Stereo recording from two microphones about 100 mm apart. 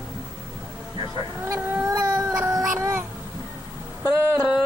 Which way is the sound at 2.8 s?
25° right (ahead or behind).